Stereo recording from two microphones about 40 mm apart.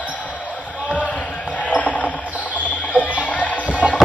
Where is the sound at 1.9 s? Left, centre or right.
Left.